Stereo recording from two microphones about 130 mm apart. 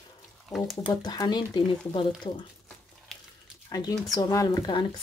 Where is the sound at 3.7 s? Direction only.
30° left (ahead or behind).